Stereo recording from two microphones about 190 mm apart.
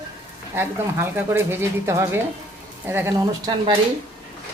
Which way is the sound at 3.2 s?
25° right (ahead or behind).